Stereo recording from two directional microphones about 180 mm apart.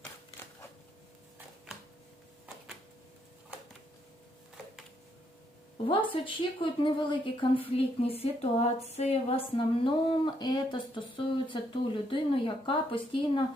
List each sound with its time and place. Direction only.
5.9 s a woman's voice: 30° left (ahead or behind)